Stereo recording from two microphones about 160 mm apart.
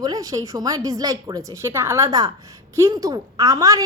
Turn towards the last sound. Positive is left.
turn(degrees=-20)  # may be behind; listen again after turning